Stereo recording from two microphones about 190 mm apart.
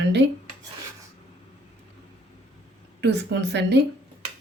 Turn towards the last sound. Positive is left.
turn(degrees=-65)  # may be behind; listen again after turning